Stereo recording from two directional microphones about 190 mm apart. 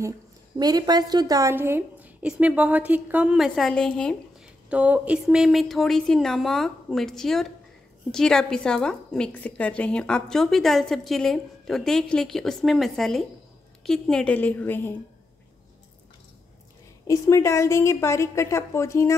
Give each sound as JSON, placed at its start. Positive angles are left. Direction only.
{"t": 0.6, "sound": "a woman's voice", "side_deg": -20}
{"t": 4.6, "sound": "a woman's voice", "side_deg": -5}
{"t": 17.1, "sound": "a woman's voice", "side_deg": 15}